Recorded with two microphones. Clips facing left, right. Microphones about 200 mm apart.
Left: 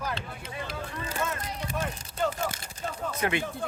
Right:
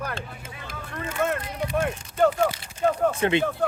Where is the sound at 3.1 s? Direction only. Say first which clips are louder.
Right 6 dB; 25° right (ahead or behind).